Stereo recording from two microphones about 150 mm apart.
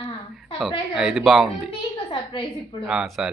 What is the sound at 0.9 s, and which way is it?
Speech, centre (ahead or behind).